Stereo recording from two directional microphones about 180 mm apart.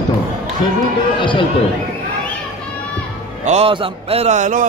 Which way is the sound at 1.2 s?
25° left (ahead or behind).